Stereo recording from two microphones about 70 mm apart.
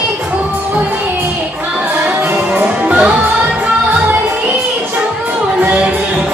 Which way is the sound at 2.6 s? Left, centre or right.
Centre.